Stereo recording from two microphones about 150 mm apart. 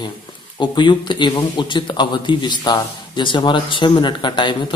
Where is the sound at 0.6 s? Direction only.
30° left (ahead or behind).